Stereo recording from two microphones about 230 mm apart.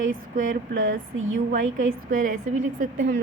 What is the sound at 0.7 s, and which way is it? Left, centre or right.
Speech, right.